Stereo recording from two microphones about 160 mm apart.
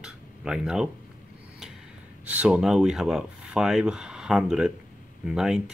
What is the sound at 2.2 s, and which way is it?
Speech, 10° right (ahead or behind).